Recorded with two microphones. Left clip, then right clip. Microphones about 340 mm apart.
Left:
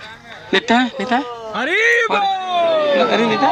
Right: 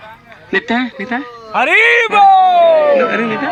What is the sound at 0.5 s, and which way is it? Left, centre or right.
Speech, centre.